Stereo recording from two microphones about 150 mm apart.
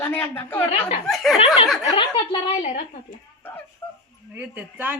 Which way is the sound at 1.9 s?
30° left (ahead or behind).